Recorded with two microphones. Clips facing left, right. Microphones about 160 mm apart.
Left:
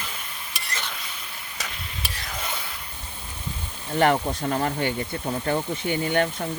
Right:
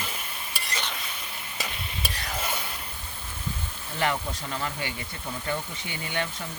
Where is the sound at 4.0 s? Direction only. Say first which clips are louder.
Left 7 dB; 55° left (ahead or behind).